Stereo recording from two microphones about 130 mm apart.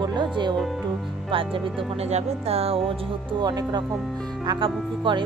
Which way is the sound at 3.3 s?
35° right (ahead or behind).